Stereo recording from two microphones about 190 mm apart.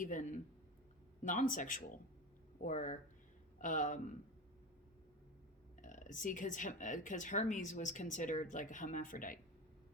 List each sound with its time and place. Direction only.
0.0 s speech: 40° left (ahead or behind)
5.8 s speech: 40° left (ahead or behind)